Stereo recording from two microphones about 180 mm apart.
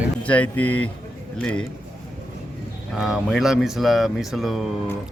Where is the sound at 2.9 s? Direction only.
Centre (ahead or behind).